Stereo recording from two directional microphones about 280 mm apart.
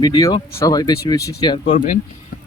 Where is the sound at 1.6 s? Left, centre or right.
Left.